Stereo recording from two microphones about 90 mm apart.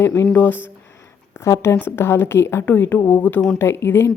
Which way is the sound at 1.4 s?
30° left (ahead or behind).